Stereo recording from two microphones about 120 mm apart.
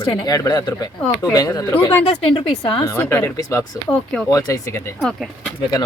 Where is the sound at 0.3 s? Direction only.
30° left (ahead or behind).